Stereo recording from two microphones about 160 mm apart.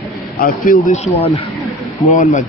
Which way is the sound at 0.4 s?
65° left (ahead or behind).